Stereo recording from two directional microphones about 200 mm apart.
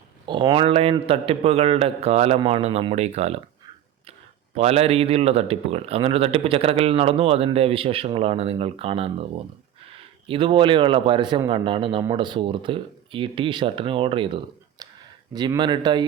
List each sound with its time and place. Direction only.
0.3 s a man's voice: 25° right (ahead or behind)
4.5 s speech: 30° right (ahead or behind)
10.2 s speech: 25° right (ahead or behind)
14.8 s a sound: 20° right (ahead or behind)
15.3 s speech: 20° right (ahead or behind)